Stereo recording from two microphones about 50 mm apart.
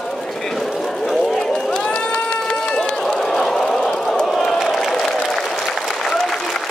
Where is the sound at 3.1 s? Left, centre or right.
Centre.